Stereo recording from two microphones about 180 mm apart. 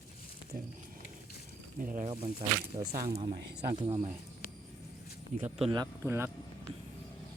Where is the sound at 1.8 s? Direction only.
50° right (ahead or behind).